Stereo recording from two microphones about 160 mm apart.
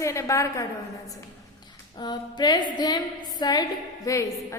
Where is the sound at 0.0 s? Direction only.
20° left (ahead or behind).